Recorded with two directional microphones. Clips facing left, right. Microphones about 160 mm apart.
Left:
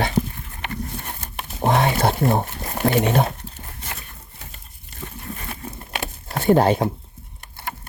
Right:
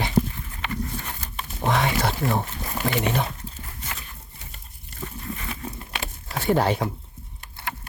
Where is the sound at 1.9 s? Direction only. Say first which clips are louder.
Left 5 dB; 55° left (ahead or behind).